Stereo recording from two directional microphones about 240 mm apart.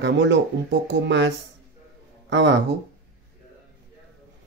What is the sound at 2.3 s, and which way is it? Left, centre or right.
Speech, right.